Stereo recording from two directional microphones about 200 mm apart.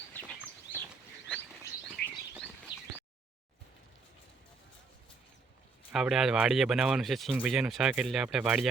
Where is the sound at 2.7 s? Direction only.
20° left (ahead or behind).